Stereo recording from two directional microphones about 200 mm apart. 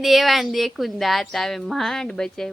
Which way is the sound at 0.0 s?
Centre (ahead or behind).